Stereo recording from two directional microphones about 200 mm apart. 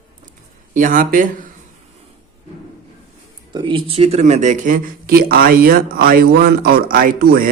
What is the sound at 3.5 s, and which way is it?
Speech, 25° right (ahead or behind).